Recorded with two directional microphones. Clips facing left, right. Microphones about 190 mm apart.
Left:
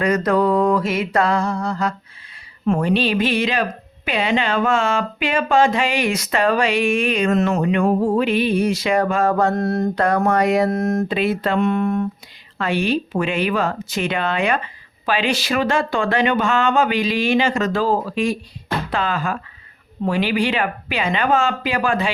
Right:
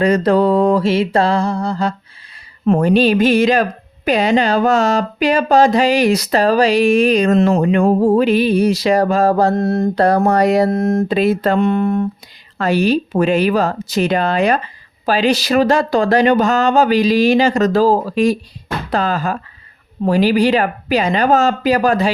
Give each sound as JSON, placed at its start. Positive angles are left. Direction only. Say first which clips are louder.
{"t": 0.0, "sound": "speech", "louder": "right 4 dB", "side_deg": -30}